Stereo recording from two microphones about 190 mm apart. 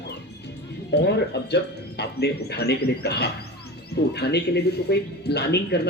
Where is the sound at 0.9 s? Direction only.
60° left (ahead or behind).